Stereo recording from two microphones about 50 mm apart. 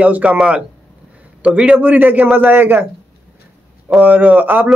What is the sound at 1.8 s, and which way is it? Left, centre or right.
Speech, right.